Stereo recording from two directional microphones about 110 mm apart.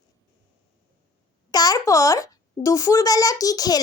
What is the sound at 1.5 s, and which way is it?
A child's voice, 35° left (ahead or behind).